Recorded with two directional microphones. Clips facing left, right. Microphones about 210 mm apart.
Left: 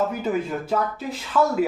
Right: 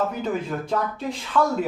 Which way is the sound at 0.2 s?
5° left (ahead or behind).